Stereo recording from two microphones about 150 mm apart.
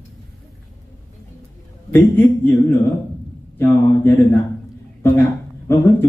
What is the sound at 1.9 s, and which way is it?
Speech, 15° left (ahead or behind).